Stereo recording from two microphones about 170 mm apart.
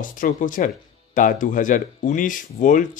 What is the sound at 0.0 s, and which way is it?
Speech, 50° left (ahead or behind).